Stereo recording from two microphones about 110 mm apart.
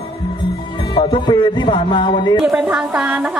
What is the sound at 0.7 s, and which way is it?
A man's voice, 50° left (ahead or behind).